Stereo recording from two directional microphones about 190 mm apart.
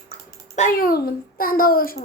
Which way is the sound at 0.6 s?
50° left (ahead or behind).